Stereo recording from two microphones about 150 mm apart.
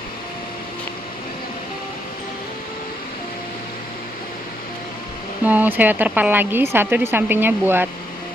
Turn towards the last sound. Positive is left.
turn(degrees=-15)  # may be behind; listen again after turning